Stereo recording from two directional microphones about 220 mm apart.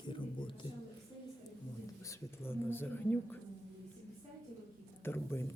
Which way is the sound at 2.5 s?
10° left (ahead or behind).